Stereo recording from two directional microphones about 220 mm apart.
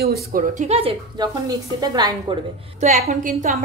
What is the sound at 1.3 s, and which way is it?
Speech, 15° right (ahead or behind).